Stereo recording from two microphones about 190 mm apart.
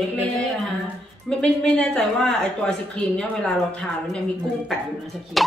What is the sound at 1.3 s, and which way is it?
Speech, 5° left (ahead or behind).